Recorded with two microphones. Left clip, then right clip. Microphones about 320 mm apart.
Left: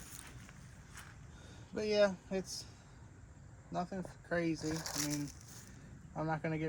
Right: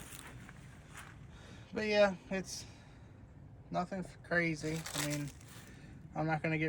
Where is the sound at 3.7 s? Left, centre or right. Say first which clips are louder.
Right 3 dB; right.